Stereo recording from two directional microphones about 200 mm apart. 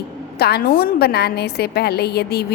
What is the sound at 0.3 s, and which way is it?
A woman's voice, 50° left (ahead or behind).